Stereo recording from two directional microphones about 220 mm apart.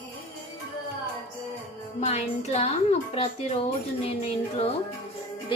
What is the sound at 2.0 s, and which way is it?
A woman's voice, 30° left (ahead or behind).